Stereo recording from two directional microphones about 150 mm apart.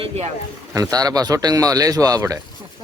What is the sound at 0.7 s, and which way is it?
Speech, 25° right (ahead or behind).